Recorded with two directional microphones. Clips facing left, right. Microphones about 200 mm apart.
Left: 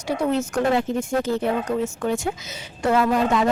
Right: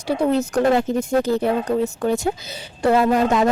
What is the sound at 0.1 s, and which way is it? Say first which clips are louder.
Speech: right 3 dB; 35° right (ahead or behind).